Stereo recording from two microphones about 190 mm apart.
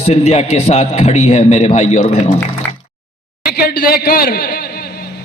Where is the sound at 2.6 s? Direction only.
10° left (ahead or behind).